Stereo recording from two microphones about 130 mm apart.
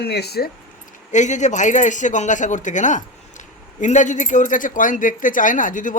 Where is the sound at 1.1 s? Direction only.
65° left (ahead or behind).